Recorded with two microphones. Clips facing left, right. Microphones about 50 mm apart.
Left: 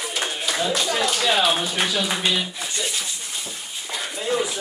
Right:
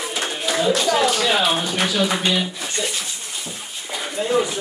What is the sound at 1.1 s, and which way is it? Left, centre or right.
A man's voice, centre.